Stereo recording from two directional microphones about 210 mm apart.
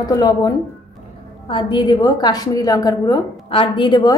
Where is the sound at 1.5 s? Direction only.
20° left (ahead or behind).